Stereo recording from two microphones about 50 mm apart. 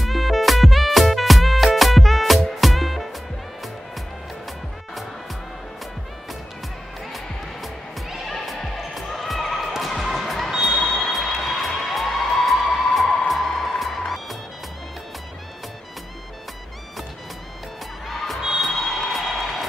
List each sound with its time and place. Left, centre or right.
0.0 s music: centre
7.6 s music: centre
10.5 s a sound: centre
10.8 s music: centre
18.0 s music: centre
18.6 s a sound: centre